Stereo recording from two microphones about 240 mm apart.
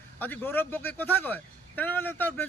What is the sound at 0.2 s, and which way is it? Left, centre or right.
Speech, centre.